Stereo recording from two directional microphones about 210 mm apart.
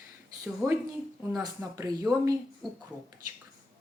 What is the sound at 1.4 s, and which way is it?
Speech, 15° right (ahead or behind).